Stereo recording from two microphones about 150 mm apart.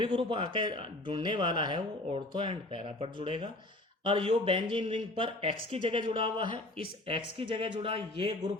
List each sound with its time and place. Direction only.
0.0 s a man's voice: 35° right (ahead or behind)